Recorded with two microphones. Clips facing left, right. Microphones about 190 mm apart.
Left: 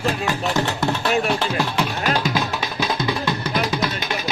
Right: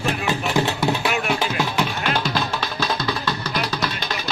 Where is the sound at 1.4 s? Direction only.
5° right (ahead or behind).